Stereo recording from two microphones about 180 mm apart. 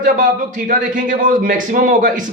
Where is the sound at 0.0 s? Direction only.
45° right (ahead or behind).